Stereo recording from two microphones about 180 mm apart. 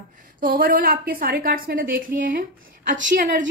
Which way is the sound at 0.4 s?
55° right (ahead or behind).